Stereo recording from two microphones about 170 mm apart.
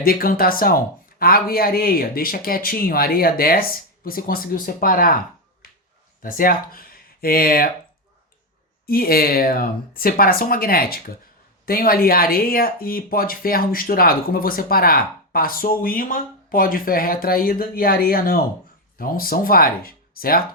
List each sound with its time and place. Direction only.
0.0 s speech: 60° left (ahead or behind)
6.2 s speech: 55° left (ahead or behind)
8.9 s speech: 60° left (ahead or behind)